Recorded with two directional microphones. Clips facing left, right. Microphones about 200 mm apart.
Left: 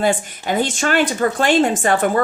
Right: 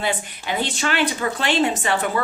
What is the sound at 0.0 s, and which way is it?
Speech, 45° left (ahead or behind).